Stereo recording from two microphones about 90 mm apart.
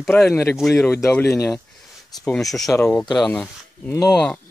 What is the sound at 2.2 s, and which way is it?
Speech, 5° left (ahead or behind).